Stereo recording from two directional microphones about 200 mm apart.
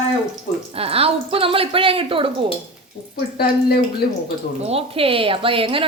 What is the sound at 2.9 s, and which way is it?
Speech, 55° left (ahead or behind).